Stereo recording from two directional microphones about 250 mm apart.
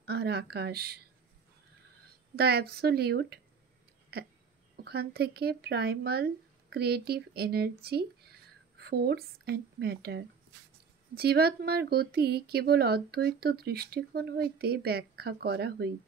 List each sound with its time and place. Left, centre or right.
0.0 s speech: right
2.3 s speech: right
4.8 s speech: right